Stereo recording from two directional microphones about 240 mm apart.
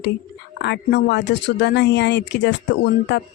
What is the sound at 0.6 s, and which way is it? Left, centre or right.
Speech, left.